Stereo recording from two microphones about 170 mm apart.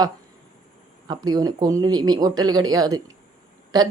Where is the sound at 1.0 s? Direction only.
25° right (ahead or behind).